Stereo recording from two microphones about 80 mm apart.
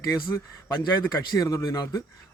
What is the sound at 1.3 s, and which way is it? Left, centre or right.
Speech, left.